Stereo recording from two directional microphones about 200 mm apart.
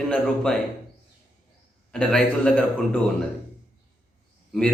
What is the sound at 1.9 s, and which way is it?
Speech, 5° left (ahead or behind).